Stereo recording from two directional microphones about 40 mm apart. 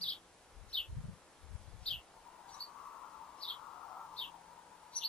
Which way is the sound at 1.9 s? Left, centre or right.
Left.